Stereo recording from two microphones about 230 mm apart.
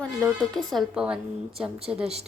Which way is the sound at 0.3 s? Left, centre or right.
Centre.